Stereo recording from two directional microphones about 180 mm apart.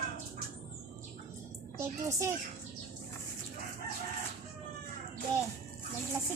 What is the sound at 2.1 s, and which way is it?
Speech, 15° right (ahead or behind).